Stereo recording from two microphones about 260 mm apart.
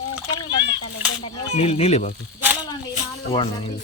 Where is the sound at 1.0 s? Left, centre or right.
Centre.